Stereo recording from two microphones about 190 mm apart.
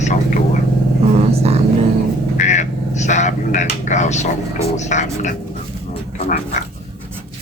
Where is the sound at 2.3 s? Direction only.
40° left (ahead or behind).